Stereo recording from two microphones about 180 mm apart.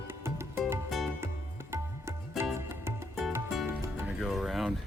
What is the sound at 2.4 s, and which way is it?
Music, 15° right (ahead or behind).